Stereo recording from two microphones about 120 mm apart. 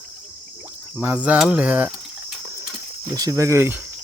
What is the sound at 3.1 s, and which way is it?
Speech, 30° right (ahead or behind).